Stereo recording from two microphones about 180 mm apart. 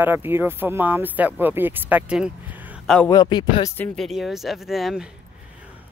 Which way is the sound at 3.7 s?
5° left (ahead or behind).